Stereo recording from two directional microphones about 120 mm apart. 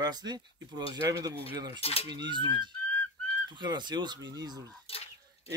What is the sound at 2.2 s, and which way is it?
Speech, 40° right (ahead or behind).